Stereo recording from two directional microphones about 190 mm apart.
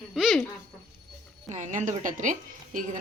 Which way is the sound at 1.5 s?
40° right (ahead or behind).